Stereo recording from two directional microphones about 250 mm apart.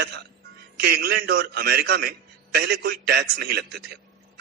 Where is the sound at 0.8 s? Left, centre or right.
Right.